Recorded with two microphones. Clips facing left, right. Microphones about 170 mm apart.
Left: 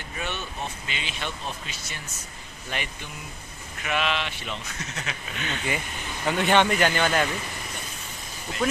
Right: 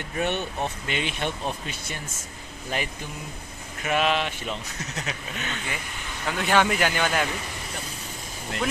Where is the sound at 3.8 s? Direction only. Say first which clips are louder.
Right 4 dB; 40° right (ahead or behind).